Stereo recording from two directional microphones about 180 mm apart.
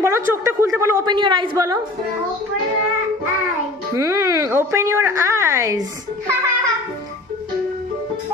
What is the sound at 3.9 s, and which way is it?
Speech, 15° right (ahead or behind).